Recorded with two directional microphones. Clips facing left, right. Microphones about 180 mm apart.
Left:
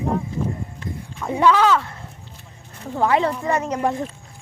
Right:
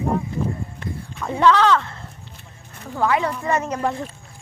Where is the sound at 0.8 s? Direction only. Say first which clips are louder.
Right 1 dB; 60° right (ahead or behind).